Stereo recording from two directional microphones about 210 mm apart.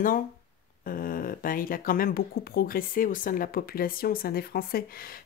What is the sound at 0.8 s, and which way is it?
Speech, 45° left (ahead or behind).